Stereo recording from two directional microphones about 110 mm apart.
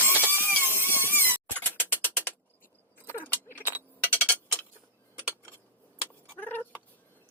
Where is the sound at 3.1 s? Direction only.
20° left (ahead or behind).